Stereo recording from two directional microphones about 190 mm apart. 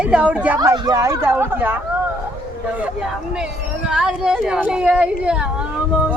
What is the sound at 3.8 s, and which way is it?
Speech, 5° right (ahead or behind).